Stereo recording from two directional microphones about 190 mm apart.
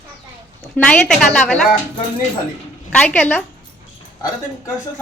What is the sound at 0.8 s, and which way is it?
Speech, 5° left (ahead or behind).